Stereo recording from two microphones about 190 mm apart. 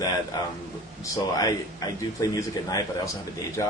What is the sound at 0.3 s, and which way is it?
Speech, 20° left (ahead or behind).